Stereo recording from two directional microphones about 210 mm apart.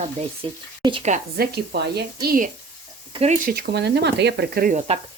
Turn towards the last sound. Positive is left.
turn(degrees=-45)  # may be behind; listen again after turning